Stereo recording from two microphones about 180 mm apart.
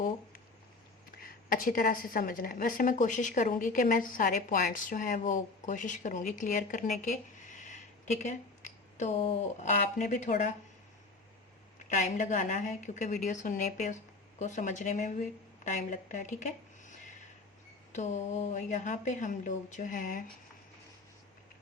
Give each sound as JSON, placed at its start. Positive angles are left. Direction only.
{"t": 1.2, "sound": "a woman's voice", "side_deg": 55}
{"t": 11.9, "sound": "a woman's voice", "side_deg": 45}